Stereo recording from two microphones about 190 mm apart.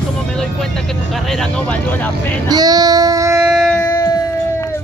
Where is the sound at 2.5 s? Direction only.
20° right (ahead or behind).